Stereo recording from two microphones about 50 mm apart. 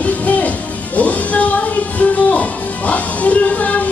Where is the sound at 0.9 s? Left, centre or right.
Left.